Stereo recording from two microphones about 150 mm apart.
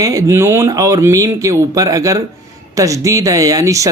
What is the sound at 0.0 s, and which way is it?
A man's voice, 20° right (ahead or behind).